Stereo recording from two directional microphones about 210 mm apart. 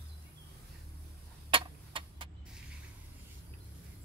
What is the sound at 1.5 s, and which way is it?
Tick-tock, 25° right (ahead or behind).